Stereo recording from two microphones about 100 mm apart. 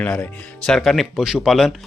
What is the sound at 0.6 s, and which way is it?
Speech, 5° left (ahead or behind).